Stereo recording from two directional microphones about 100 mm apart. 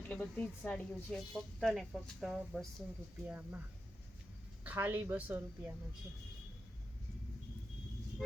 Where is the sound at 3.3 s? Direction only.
15° right (ahead or behind).